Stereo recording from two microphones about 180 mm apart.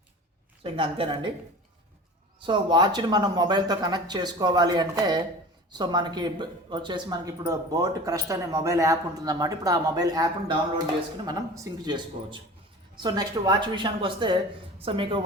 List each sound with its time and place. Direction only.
0.6 s speech: 30° right (ahead or behind)
2.5 s speech: 25° right (ahead or behind)